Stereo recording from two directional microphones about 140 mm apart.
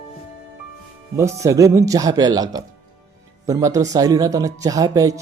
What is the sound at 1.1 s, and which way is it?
Speech, 20° right (ahead or behind).